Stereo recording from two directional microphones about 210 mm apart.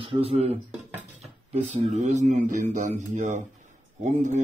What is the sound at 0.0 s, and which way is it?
Speech, 25° right (ahead or behind).